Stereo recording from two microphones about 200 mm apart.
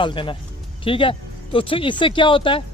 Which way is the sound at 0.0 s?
25° left (ahead or behind).